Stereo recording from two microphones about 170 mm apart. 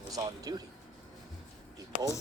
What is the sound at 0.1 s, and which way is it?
Speech, 20° right (ahead or behind).